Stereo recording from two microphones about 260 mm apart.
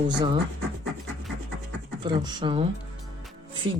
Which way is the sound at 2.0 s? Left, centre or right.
Centre.